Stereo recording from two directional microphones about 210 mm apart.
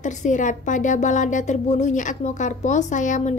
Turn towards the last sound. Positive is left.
turn(degrees=35)  # may be behind; listen again after turning